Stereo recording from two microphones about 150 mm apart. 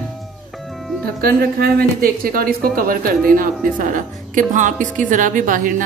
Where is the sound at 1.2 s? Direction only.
80° right.